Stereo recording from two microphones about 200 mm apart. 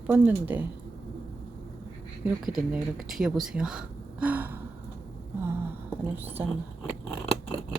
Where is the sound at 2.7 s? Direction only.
Centre (ahead or behind).